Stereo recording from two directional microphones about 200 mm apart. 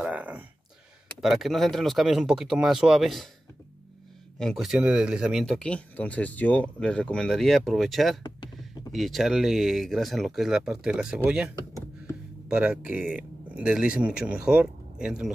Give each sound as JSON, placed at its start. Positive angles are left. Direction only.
{"t": 0.0, "sound": "a sound", "side_deg": -5}
{"t": 1.0, "sound": "speech", "side_deg": 0}
{"t": 4.4, "sound": "speech", "side_deg": 0}